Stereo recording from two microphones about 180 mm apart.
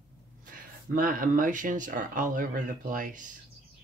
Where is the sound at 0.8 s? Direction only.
50° right (ahead or behind).